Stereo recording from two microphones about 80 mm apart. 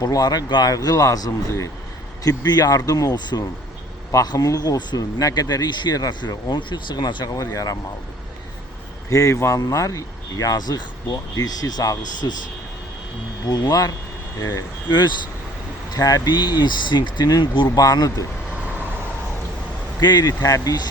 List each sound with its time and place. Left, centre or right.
0.0 s speech: left
2.2 s speech: left
7.3 s speech: left
9.0 s a man's voice: left
9.6 s speech: left
13.5 s speech: left
16.0 s speech: left
17.7 s speech: left
20.0 s speech: left